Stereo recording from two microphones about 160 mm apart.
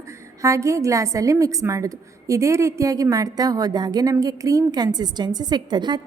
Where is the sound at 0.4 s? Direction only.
20° right (ahead or behind).